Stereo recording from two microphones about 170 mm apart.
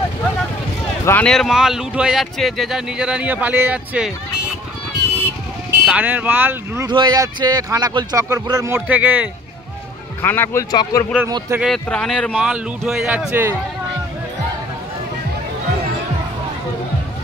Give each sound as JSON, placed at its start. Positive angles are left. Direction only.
{"t": 1.0, "sound": "speech", "side_deg": 10}
{"t": 5.9, "sound": "speech", "side_deg": -10}
{"t": 6.9, "sound": "speech", "side_deg": -25}
{"t": 10.2, "sound": "speech", "side_deg": 10}
{"t": 11.2, "sound": "speech", "side_deg": -20}
{"t": 11.6, "sound": "speech", "side_deg": 5}